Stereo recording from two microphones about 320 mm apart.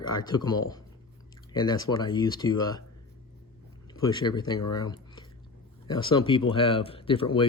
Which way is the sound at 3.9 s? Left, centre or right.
Centre.